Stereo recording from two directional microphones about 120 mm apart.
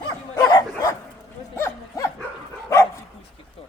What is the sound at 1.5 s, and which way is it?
Livestock, 20° left (ahead or behind).